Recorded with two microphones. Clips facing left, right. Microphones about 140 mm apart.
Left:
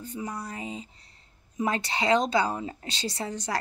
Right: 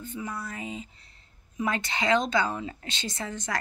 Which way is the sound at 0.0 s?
35° left (ahead or behind).